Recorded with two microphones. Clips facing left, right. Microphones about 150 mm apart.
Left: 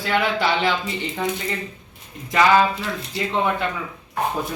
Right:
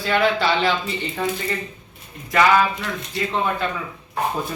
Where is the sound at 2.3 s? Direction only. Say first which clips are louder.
Even; 20° left (ahead or behind).